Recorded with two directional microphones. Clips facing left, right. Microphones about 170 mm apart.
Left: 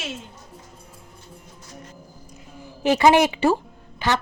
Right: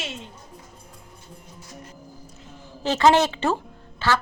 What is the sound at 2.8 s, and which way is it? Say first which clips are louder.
A woman's voice: left 2 dB; 15° left (ahead or behind).